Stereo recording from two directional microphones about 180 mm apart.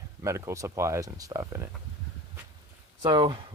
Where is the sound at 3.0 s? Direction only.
25° right (ahead or behind).